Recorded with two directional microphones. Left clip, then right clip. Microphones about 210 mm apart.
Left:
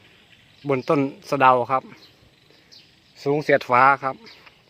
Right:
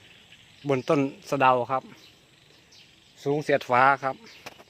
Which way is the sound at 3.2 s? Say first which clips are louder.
Left 5 dB; 20° left (ahead or behind).